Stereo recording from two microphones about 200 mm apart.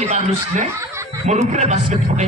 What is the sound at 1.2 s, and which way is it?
Speech, 35° right (ahead or behind).